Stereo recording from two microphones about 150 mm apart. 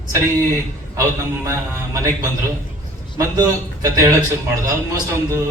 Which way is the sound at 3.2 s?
20° right (ahead or behind).